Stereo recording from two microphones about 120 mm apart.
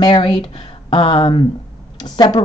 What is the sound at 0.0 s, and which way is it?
Speech, 45° left (ahead or behind).